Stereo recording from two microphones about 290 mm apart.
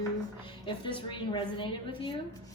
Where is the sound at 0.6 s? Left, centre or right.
Centre.